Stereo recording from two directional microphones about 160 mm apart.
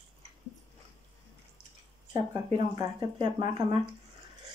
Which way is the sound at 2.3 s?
25° right (ahead or behind).